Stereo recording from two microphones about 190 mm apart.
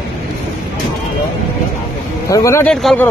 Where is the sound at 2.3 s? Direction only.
15° left (ahead or behind).